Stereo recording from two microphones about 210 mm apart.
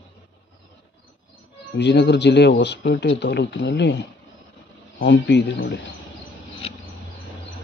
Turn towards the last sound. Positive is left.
turn(degrees=30)  # may be behind; listen again after turning